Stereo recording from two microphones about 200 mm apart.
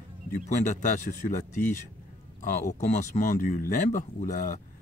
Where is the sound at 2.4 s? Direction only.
40° left (ahead or behind).